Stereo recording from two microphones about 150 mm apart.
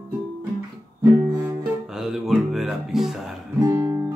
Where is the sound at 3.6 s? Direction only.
25° right (ahead or behind).